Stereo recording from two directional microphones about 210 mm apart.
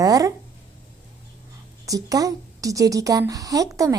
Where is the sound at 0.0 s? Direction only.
15° right (ahead or behind).